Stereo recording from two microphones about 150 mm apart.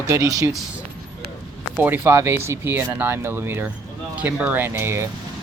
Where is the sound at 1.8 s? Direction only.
10° right (ahead or behind).